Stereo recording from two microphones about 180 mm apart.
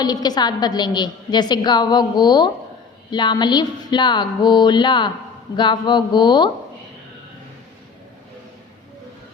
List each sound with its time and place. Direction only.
0.0 s a woman's voice: 20° left (ahead or behind)